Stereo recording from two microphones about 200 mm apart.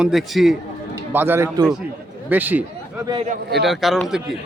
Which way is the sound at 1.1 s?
10° right (ahead or behind).